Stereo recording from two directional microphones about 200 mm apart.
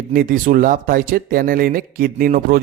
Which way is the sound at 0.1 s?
45° right (ahead or behind).